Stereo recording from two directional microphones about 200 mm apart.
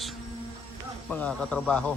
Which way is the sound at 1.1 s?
5° left (ahead or behind).